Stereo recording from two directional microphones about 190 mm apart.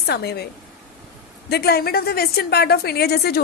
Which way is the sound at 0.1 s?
55° left (ahead or behind).